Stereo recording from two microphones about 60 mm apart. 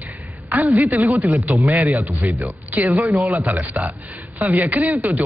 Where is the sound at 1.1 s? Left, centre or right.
Right.